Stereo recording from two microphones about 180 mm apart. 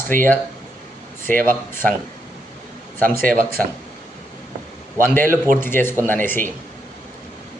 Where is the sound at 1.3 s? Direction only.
50° right (ahead or behind).